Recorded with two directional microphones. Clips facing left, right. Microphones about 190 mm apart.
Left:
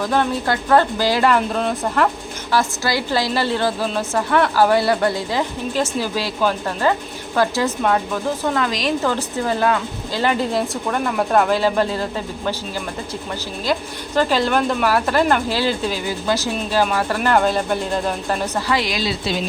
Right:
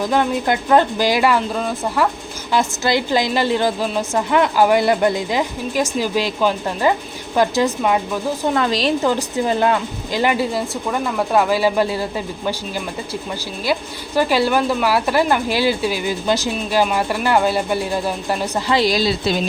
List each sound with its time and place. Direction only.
0.0 s a woman's voice: 15° right (ahead or behind)
1.4 s speech: centre (ahead or behind)
2.5 s a woman's voice: 20° right (ahead or behind)
8.5 s a woman's voice: 30° right (ahead or behind)
9.0 s a woman's voice: 15° right (ahead or behind)
10.5 s speech: 5° right (ahead or behind)
14.2 s a woman's voice: 10° right (ahead or behind)
18.7 s a woman's voice: 35° right (ahead or behind)